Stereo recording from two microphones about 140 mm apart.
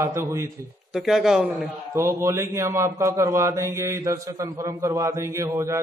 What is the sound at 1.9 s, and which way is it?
A man's voice, 20° right (ahead or behind).